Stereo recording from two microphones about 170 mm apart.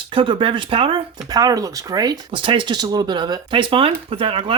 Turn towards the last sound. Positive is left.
turn(degrees=-30)  # may be behind; listen again after turning